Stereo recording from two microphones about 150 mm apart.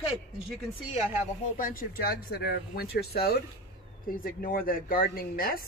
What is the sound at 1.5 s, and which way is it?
Speech, 70° left (ahead or behind).